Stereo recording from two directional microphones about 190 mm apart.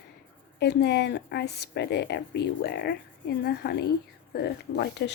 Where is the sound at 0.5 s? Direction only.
65° left (ahead or behind).